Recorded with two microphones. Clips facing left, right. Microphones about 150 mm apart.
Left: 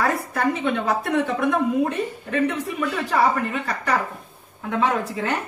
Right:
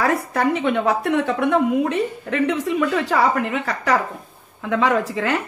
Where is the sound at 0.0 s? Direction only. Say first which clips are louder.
Right 3 dB; 70° right (ahead or behind).